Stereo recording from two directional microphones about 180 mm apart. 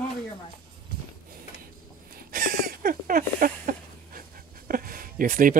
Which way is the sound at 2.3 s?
55° right (ahead or behind).